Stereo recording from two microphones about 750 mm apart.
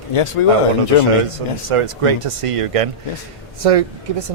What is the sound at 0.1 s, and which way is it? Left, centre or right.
Speech, left.